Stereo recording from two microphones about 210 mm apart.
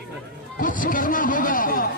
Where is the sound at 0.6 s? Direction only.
40° left (ahead or behind).